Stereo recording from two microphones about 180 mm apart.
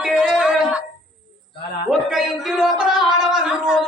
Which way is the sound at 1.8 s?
Centre (ahead or behind).